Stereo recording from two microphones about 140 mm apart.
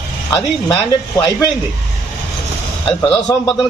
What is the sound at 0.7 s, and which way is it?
Speech, 35° left (ahead or behind).